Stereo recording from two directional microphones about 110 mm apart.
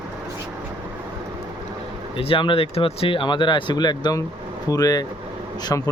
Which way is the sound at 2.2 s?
55° left (ahead or behind).